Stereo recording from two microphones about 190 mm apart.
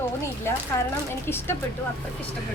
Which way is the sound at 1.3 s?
10° left (ahead or behind).